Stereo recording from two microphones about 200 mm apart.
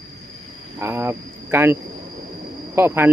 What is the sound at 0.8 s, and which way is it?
Speech, 10° right (ahead or behind).